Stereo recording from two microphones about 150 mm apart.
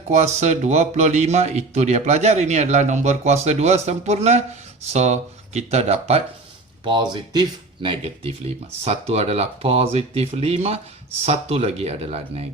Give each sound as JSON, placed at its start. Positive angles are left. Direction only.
{"t": 0.1, "sound": "speech", "side_deg": -50}
{"t": 6.8, "sound": "speech", "side_deg": -30}